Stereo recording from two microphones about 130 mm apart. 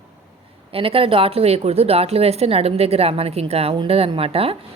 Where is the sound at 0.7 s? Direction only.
45° right (ahead or behind).